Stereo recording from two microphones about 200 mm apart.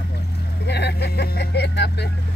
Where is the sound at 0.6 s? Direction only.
55° left (ahead or behind).